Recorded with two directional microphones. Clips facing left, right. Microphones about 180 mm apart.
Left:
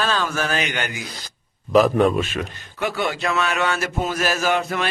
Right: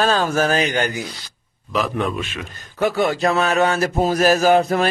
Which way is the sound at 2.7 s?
40° right (ahead or behind).